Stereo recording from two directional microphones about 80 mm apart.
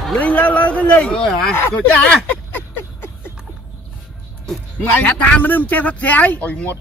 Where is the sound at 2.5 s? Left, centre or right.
Left.